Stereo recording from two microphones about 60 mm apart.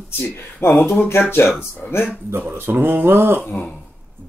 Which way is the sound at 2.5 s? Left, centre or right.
Right.